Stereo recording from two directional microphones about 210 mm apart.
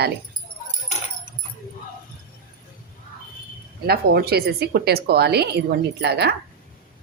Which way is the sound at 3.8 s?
50° right (ahead or behind).